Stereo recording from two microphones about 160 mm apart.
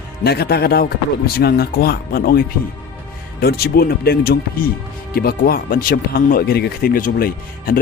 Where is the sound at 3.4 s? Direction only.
70° left (ahead or behind).